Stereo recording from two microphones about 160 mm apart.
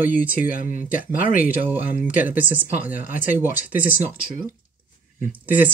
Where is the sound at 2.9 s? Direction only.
55° left (ahead or behind).